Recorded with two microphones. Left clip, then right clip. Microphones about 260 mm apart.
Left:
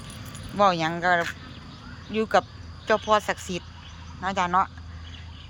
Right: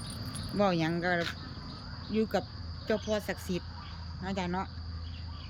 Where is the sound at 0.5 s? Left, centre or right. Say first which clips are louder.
Left 8 dB; centre.